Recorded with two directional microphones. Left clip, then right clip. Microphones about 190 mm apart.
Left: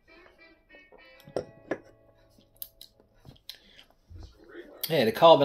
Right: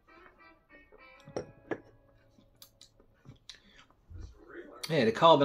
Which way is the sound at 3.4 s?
15° right (ahead or behind).